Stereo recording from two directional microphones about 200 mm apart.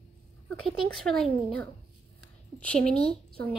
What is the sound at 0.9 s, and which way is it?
A child's voice, centre (ahead or behind).